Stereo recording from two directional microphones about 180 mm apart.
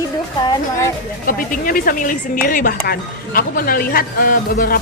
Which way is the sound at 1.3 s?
50° left (ahead or behind).